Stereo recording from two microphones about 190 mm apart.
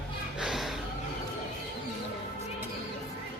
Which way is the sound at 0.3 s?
Centre (ahead or behind).